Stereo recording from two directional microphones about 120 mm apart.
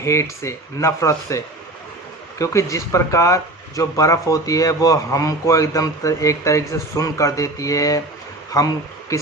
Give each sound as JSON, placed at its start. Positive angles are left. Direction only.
{"t": 0.0, "sound": "speech", "side_deg": 25}
{"t": 2.4, "sound": "speech", "side_deg": 25}